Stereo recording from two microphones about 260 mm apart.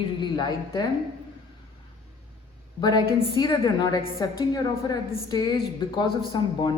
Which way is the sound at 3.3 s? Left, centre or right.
Centre.